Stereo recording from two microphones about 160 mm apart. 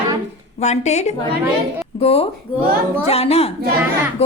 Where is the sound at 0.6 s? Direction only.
45° left (ahead or behind).